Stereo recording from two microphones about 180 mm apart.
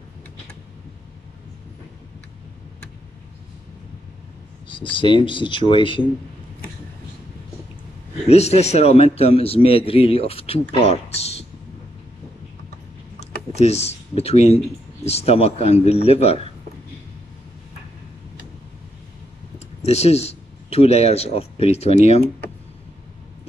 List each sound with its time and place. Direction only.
4.6 s speech: 25° left (ahead or behind)
8.3 s a man's voice: 35° left (ahead or behind)
13.2 s a man's voice: 35° left (ahead or behind)
19.8 s speech: 35° left (ahead or behind)